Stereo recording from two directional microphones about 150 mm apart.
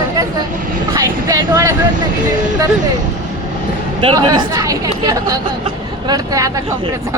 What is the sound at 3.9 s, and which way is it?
Speech, 35° right (ahead or behind).